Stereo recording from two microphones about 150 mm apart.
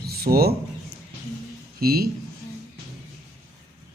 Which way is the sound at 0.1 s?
90° right.